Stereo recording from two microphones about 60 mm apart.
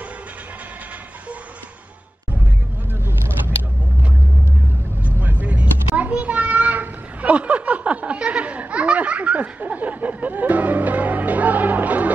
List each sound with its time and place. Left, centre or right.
5.0 s vehicle: right